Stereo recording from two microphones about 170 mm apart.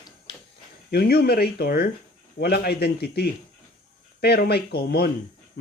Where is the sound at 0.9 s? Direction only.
65° left (ahead or behind).